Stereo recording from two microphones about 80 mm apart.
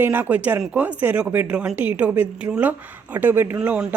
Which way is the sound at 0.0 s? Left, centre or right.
Right.